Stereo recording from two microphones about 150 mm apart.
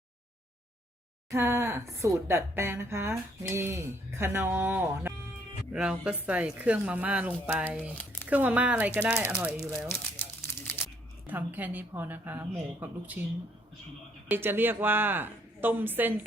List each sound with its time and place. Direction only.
1.3 s speech: 20° right (ahead or behind)
7.9 s speech: 10° left (ahead or behind)
8.3 s speech: 10° right (ahead or behind)
10.2 s a sound: 15° left (ahead or behind)
11.3 s speech: 10° right (ahead or behind)
14.3 s speech: 15° right (ahead or behind)